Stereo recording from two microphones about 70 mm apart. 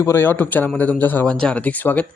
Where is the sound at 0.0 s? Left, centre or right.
Left.